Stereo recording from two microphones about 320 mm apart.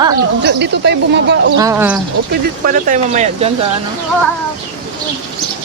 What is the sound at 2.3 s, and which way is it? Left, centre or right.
Speech, right.